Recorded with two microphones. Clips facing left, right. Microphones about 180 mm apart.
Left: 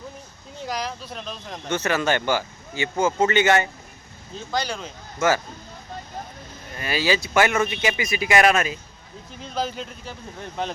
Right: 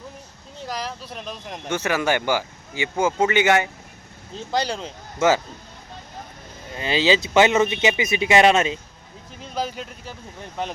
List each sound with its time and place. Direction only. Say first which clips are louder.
0.7 s speech: left 1 dB; 5° right (ahead or behind)
4.5 s speech: right 3 dB; 30° right (ahead or behind)
6.7 s speech: right 3 dB; 20° right (ahead or behind)
9.5 s speech: even; 10° right (ahead or behind)